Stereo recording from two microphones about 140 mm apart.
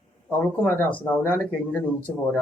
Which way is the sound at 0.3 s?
15° left (ahead or behind).